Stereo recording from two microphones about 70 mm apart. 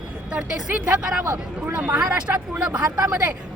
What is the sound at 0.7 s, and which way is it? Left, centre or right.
Speech, centre.